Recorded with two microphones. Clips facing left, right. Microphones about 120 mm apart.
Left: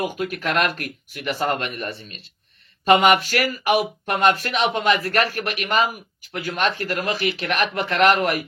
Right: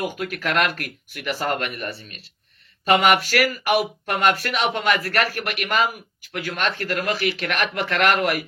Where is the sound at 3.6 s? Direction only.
25° left (ahead or behind).